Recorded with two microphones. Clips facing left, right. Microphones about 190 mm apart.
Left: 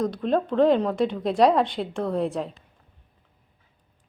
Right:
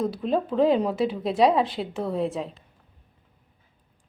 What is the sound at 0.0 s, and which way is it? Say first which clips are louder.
Speech: left 1 dB; 5° right (ahead or behind).